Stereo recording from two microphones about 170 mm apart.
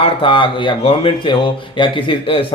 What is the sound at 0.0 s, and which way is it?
Speech, 30° left (ahead or behind).